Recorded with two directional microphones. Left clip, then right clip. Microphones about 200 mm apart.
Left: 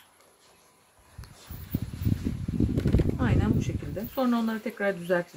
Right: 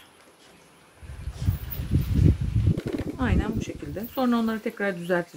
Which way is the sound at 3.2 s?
40° right (ahead or behind).